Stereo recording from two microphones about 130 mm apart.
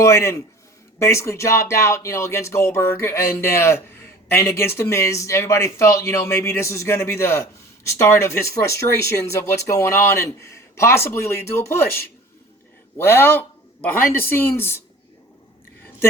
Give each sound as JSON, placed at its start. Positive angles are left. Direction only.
{"t": 0.0, "sound": "speech", "side_deg": 20}
{"t": 13.0, "sound": "speech", "side_deg": 20}